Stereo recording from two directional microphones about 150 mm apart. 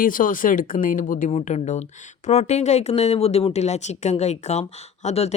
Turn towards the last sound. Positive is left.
turn(degrees=45)  # may be behind; listen again after turning